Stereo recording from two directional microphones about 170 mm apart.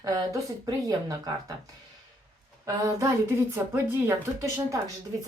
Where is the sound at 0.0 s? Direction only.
20° right (ahead or behind).